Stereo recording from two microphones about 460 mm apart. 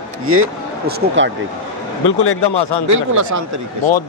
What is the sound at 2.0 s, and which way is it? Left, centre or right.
Speech, left.